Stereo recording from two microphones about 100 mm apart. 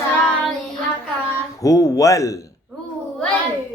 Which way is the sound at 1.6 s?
35° left (ahead or behind).